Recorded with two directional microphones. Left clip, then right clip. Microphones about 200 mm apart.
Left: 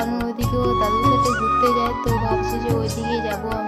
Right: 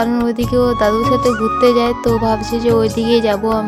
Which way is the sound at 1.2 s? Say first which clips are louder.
Right 3 dB; centre (ahead or behind).